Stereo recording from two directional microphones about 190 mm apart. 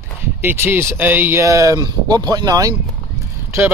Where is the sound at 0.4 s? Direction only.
10° right (ahead or behind).